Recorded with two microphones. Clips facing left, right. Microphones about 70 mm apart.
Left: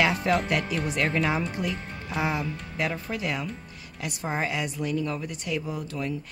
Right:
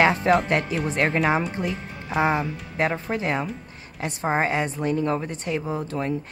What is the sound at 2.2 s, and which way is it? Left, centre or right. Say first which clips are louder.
A woman's voice: right 6 dB; right.